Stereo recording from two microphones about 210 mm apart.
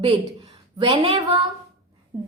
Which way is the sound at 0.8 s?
25° right (ahead or behind).